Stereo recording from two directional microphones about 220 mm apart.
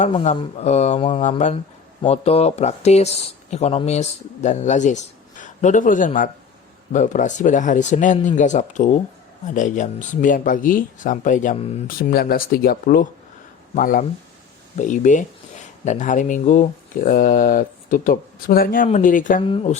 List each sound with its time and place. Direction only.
0.0 s speech: 30° left (ahead or behind)
19.4 s speech: 25° left (ahead or behind)